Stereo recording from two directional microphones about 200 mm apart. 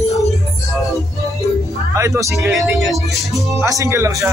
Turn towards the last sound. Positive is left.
turn(degrees=-15)  # may be behind; listen again after turning